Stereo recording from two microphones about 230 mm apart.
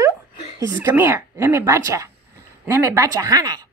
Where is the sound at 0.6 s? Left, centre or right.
Centre.